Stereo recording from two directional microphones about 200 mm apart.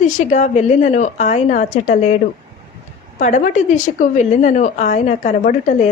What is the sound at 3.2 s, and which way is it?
A woman's voice, 35° left (ahead or behind).